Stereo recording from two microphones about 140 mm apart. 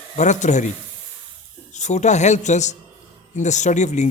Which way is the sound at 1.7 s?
55° left (ahead or behind).